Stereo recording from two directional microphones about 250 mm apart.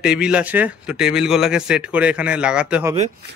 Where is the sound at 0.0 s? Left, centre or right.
Centre.